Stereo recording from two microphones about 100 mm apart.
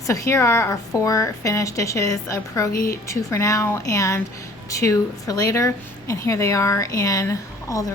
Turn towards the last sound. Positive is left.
turn(degrees=30)  # may be behind; listen again after turning